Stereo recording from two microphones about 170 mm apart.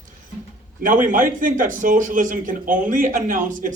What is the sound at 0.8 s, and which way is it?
A man's voice, 50° right (ahead or behind).